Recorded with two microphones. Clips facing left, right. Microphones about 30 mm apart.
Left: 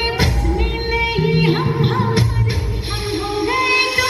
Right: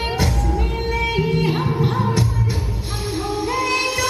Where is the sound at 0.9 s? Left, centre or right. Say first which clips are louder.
Left 3 dB; left.